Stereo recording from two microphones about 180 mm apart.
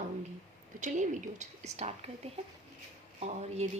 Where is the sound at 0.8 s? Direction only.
45° right (ahead or behind).